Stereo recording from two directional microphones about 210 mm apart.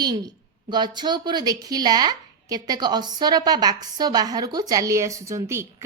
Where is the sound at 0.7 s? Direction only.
20° right (ahead or behind).